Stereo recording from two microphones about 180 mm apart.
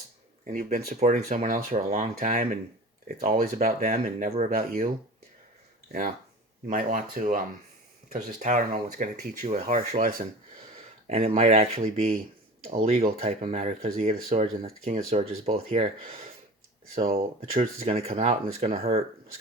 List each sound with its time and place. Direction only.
0.4 s speech: 50° right (ahead or behind)
0.9 s speech: 40° right (ahead or behind)
3.8 s speech: 40° right (ahead or behind)
6.7 s speech: 45° right (ahead or behind)
11.3 s speech: 40° right (ahead or behind)